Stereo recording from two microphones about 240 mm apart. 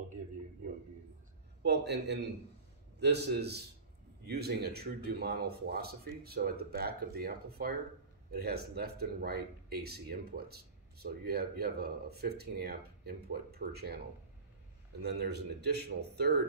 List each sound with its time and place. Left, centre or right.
1.6 s speech: right
15.0 s speech: right